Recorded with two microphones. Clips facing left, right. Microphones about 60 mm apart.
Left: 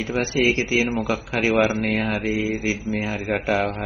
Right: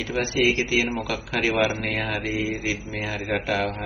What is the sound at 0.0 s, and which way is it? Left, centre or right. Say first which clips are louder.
Speech: left 2 dB; left.